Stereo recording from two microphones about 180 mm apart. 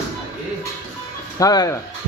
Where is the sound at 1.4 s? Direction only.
20° left (ahead or behind).